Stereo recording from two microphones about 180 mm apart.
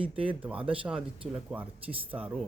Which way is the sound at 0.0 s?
30° right (ahead or behind).